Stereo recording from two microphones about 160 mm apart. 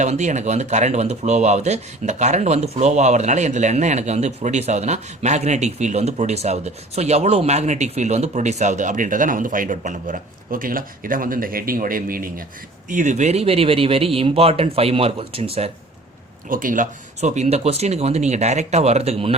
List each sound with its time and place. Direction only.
0.0 s speech: 50° right (ahead or behind)
12.9 s speech: 50° right (ahead or behind)
16.5 s speech: 60° right (ahead or behind); by 19.4 s 40° right (ahead or behind)